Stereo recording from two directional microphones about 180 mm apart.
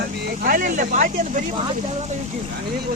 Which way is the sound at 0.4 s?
50° right (ahead or behind).